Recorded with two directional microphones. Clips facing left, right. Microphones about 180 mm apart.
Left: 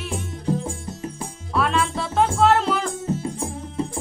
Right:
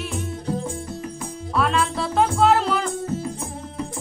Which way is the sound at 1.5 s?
Centre (ahead or behind).